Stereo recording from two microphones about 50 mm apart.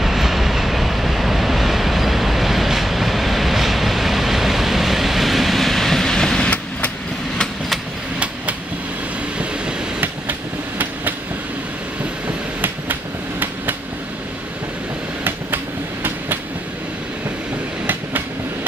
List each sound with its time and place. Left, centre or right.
0.0 s vehicle: centre
15.2 s train: right
17.8 s train: right